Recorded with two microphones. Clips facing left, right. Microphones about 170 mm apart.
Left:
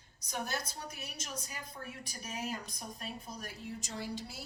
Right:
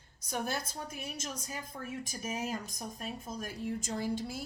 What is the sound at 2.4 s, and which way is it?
A woman's voice, 45° right (ahead or behind).